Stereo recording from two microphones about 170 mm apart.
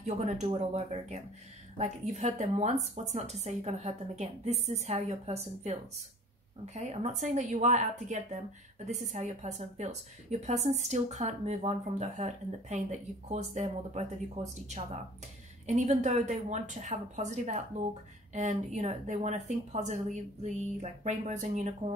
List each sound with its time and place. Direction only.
0.0 s a woman's voice: 45° right (ahead or behind)
15.6 s a woman's voice: 45° right (ahead or behind)